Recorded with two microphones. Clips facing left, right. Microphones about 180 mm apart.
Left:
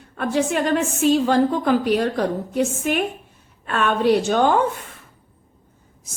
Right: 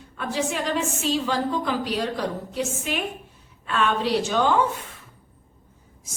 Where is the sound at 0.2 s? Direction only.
55° left (ahead or behind).